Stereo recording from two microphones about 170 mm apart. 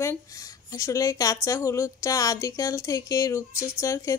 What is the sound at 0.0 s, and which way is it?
Speech, 20° left (ahead or behind).